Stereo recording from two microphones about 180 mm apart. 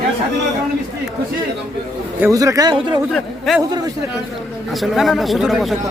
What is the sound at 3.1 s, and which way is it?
Speech, centre (ahead or behind).